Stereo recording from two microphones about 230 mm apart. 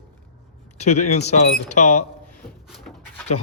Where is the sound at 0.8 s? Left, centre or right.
Left.